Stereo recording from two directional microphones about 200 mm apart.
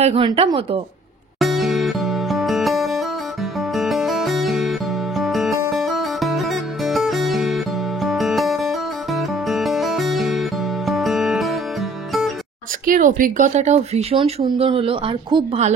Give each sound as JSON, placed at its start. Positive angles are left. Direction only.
{"t": 0.0, "sound": "speech", "side_deg": -30}
{"t": 1.4, "sound": "music", "side_deg": 0}
{"t": 12.8, "sound": "speech", "side_deg": -45}